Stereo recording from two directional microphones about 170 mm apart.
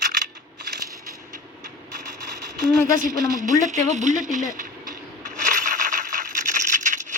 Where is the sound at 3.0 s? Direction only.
50° right (ahead or behind).